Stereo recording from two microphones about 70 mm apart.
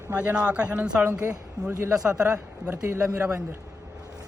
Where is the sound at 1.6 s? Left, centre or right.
Right.